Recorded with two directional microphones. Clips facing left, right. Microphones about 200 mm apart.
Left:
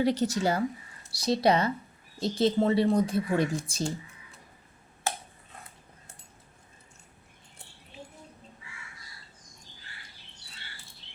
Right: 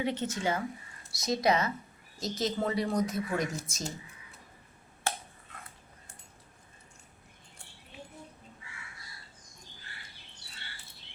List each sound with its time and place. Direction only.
0.0 s speech: 40° left (ahead or behind)